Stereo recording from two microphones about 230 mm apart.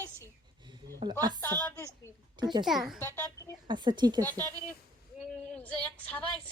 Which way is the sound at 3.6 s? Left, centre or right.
Centre.